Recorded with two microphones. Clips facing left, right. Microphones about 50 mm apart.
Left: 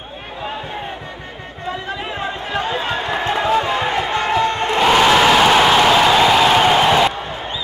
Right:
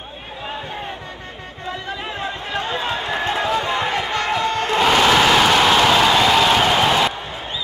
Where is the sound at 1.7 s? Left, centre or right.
Centre.